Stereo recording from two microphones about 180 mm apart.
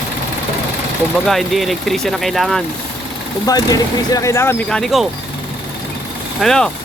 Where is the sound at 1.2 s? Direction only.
Centre (ahead or behind).